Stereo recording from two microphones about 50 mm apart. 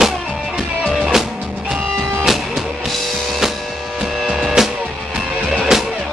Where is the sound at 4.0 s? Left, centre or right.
Centre.